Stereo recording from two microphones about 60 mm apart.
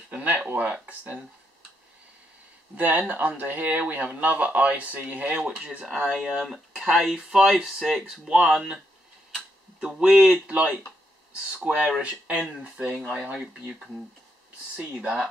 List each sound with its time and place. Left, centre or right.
0.1 s a sound: right
0.6 s speech: right
2.7 s speech: right
5.9 s speech: centre
9.8 s speech: centre
13.2 s speech: centre
14.8 s speech: right